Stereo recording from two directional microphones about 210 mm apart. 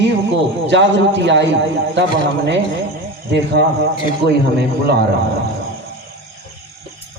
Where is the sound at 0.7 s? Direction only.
55° right (ahead or behind).